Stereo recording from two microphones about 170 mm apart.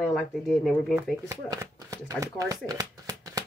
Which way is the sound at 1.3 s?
20° right (ahead or behind).